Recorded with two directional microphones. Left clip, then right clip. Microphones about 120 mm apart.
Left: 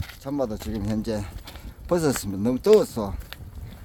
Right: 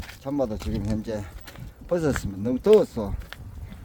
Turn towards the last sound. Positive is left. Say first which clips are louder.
# even
turn(degrees=40)  # may be behind; listen again after turning